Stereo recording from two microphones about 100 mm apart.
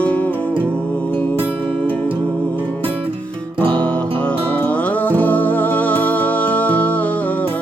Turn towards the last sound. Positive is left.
turn(degrees=15)  # may be behind; listen again after turning